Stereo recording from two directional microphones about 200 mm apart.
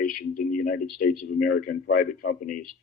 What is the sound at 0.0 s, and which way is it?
A man's voice, 45° left (ahead or behind).